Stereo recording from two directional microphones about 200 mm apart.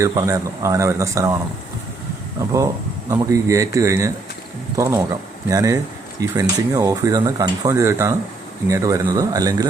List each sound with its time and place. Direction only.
0.0 s speech: 15° right (ahead or behind)
3.1 s speech: 15° right (ahead or behind)